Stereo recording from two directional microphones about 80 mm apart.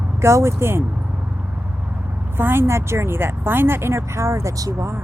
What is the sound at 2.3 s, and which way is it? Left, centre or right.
Speech, right.